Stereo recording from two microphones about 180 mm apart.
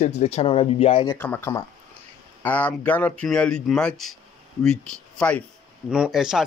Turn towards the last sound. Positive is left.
turn(degrees=0)  # may be behind; listen again after turning